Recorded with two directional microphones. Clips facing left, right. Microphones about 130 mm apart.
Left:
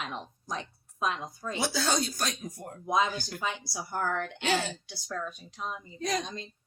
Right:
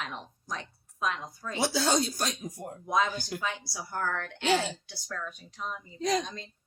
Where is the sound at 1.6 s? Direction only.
25° right (ahead or behind).